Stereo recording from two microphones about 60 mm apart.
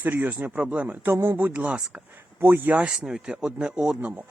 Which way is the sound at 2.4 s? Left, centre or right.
Right.